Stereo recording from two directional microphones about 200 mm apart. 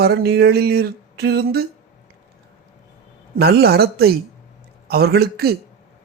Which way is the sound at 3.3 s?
50° right (ahead or behind).